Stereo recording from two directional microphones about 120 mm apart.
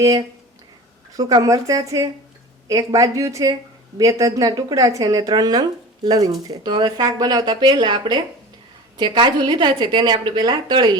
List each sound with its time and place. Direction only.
0.0 s a woman's voice: 30° right (ahead or behind)
6.7 s a woman's voice: 40° right (ahead or behind)